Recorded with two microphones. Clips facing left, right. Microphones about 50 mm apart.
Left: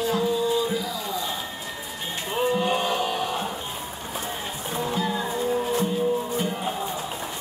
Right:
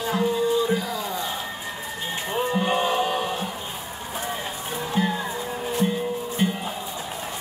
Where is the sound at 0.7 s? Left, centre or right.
Right.